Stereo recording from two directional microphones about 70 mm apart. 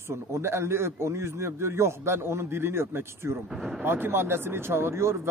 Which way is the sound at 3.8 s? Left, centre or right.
Right.